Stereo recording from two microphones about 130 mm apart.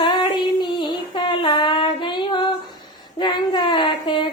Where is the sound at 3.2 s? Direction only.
35° left (ahead or behind).